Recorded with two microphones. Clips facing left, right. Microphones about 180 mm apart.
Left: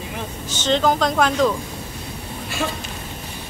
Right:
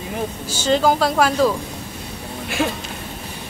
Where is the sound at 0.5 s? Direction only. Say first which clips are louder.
Right 1 dB; 10° right (ahead or behind).